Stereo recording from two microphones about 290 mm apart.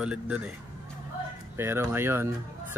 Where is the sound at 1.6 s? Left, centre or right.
Centre.